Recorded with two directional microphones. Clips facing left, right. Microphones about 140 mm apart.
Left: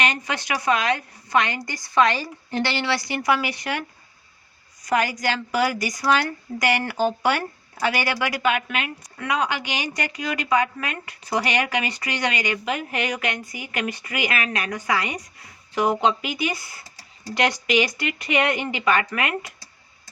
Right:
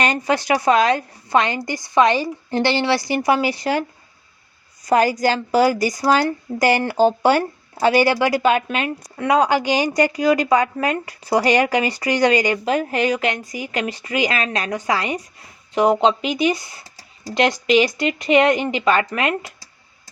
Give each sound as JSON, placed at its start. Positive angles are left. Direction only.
{"t": 0.0, "sound": "a woman's voice", "side_deg": -40}
{"t": 4.9, "sound": "a woman's voice", "side_deg": -35}